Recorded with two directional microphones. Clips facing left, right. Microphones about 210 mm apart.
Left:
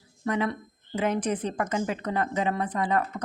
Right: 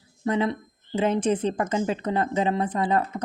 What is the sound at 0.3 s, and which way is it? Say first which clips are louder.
Speech: right 3 dB; 25° right (ahead or behind).